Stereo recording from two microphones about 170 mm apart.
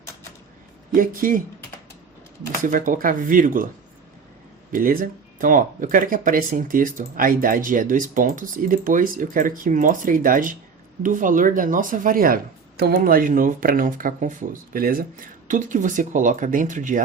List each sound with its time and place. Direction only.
0.9 s speech: 55° right (ahead or behind)
2.6 s speech: 50° right (ahead or behind)
4.7 s speech: 55° right (ahead or behind)